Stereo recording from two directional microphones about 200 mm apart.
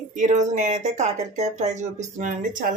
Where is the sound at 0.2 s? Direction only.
40° right (ahead or behind).